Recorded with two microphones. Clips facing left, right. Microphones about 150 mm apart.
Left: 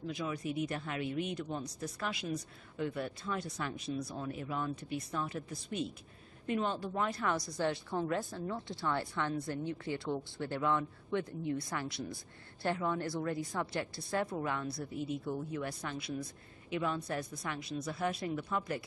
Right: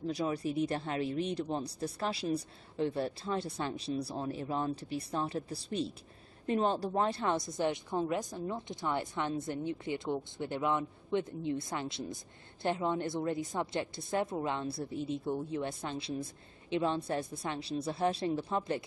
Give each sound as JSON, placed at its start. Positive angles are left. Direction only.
{"t": 0.0, "sound": "a woman's voice", "side_deg": -35}